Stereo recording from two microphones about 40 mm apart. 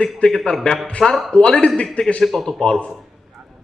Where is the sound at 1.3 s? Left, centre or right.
Centre.